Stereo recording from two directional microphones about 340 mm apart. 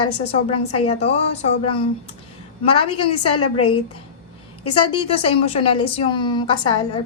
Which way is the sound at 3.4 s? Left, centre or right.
Left.